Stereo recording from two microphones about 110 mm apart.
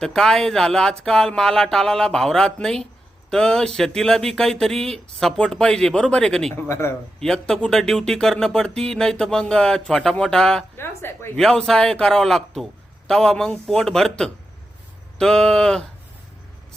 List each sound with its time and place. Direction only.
0.0 s speech: 5° left (ahead or behind)
6.6 s speech: 25° left (ahead or behind)
7.2 s speech: 5° left (ahead or behind)
10.8 s speech: 20° left (ahead or behind)
11.3 s speech: 5° left (ahead or behind)